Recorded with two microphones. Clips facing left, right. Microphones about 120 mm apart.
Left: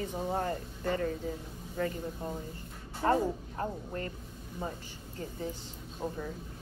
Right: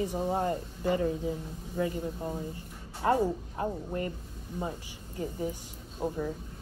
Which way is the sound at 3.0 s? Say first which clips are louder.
Right 2 dB; 15° right (ahead or behind).